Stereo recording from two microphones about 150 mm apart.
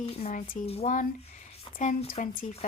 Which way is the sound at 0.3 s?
65° left (ahead or behind).